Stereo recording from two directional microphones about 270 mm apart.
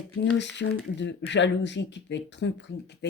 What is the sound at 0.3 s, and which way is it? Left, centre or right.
Speech, left.